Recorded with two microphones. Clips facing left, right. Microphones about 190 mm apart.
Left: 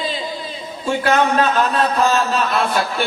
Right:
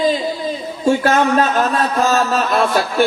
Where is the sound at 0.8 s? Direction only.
45° right (ahead or behind).